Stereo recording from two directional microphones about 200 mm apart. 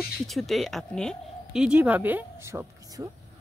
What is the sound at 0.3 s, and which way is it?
Speech, centre (ahead or behind).